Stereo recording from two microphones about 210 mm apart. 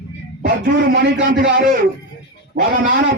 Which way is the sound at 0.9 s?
55° right (ahead or behind).